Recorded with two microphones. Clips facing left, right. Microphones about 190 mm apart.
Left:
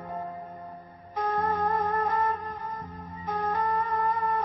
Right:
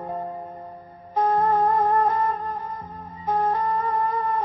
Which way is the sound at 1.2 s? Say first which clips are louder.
Right 7 dB; 30° right (ahead or behind).